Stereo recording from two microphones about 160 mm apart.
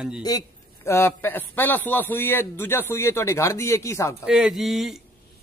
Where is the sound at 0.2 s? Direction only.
20° left (ahead or behind).